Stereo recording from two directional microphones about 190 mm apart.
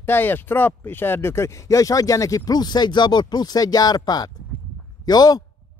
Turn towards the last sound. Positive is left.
turn(degrees=20)  # may be behind; listen again after turning